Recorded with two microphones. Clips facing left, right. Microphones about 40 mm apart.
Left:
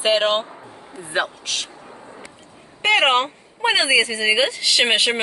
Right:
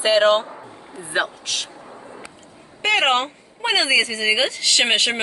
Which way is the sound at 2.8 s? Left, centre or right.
Centre.